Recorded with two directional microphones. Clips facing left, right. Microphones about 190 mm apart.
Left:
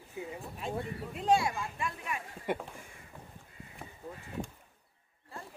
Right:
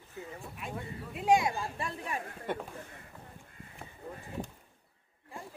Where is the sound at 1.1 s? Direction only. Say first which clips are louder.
Right 2 dB; 5° right (ahead or behind).